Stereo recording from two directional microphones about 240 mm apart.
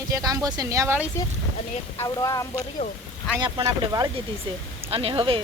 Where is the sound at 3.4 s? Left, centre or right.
Centre.